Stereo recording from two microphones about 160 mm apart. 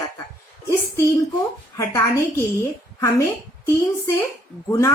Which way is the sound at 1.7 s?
20° left (ahead or behind).